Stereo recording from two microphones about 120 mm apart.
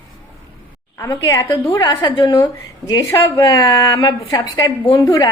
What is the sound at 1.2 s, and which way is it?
Speech, 35° left (ahead or behind).